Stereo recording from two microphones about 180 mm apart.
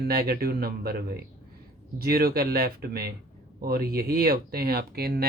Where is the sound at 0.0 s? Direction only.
60° right (ahead or behind).